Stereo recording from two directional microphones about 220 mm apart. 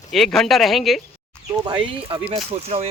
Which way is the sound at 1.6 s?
25° right (ahead or behind).